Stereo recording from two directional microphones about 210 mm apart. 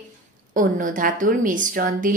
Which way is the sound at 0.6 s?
40° right (ahead or behind).